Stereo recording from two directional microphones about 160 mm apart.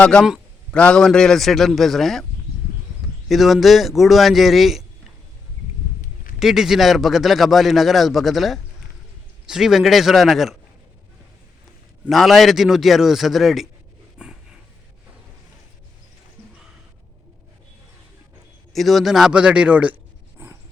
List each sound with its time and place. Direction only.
0.0 s a man's voice: 5° left (ahead or behind)
3.2 s a man's voice: centre (ahead or behind)
6.4 s a man's voice: centre (ahead or behind)
12.0 s a man's voice: centre (ahead or behind)
18.7 s a man's voice: centre (ahead or behind)